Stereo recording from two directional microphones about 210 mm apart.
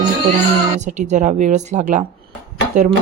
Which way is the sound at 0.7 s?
35° right (ahead or behind).